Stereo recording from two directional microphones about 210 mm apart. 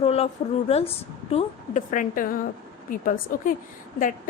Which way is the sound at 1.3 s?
30° left (ahead or behind).